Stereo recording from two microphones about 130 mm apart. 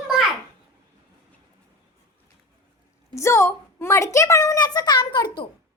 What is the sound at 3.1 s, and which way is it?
A woman's voice, 20° left (ahead or behind).